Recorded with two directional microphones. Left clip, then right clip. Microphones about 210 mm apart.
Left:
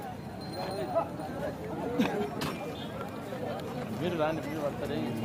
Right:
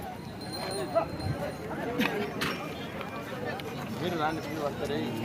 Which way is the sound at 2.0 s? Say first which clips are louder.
Right 1 dB; 45° left (ahead or behind).